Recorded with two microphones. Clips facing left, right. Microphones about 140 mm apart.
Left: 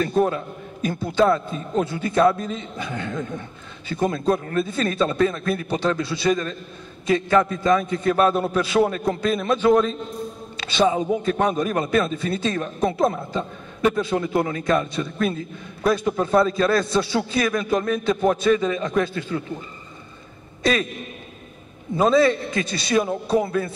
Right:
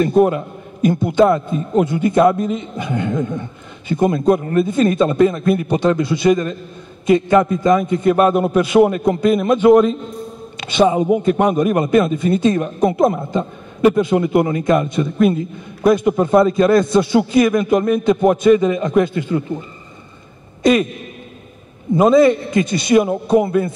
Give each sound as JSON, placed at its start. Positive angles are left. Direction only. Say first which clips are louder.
{"t": 0.0, "sound": "a man's voice", "louder": "right 7 dB", "side_deg": -15}
{"t": 21.9, "sound": "a man's voice", "louder": "right 6 dB", "side_deg": -15}